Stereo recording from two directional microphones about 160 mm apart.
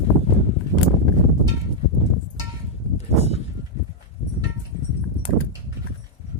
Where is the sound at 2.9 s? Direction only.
40° left (ahead or behind).